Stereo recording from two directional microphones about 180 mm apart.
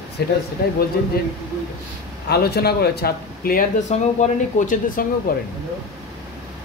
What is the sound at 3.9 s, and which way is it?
Speech, 40° left (ahead or behind).